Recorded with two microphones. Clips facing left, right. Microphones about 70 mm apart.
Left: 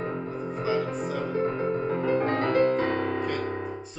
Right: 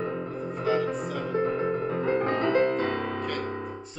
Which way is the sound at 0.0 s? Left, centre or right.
Left.